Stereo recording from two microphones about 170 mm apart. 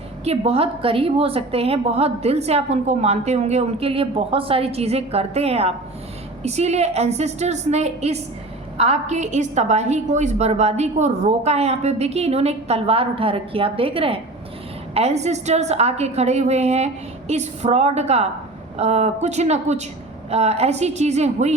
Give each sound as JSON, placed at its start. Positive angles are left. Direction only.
{"t": 0.3, "sound": "a woman's voice", "side_deg": -35}